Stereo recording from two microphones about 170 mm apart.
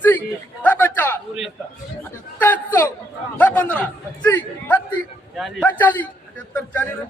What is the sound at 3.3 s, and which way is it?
A man's voice, 10° left (ahead or behind).